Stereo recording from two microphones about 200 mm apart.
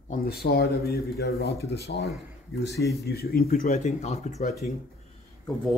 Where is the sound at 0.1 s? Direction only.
50° left (ahead or behind).